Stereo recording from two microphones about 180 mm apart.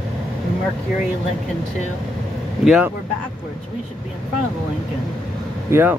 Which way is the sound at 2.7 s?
5° right (ahead or behind).